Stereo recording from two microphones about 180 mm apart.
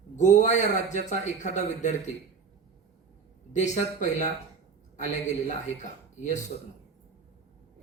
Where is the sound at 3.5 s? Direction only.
40° left (ahead or behind).